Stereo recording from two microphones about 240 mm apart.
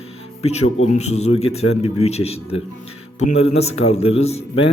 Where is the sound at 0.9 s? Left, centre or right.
Left.